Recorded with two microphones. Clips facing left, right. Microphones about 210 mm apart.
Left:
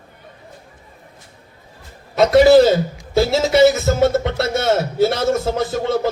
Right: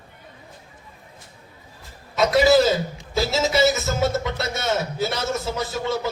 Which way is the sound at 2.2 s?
55° left (ahead or behind).